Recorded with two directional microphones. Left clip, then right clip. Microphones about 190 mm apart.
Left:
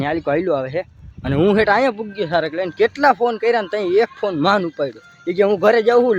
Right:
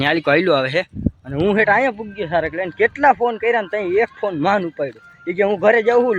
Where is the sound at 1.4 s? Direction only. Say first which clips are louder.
Left 1 dB; 20° left (ahead or behind).